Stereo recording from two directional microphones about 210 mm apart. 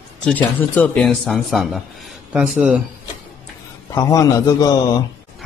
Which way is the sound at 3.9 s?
15° left (ahead or behind).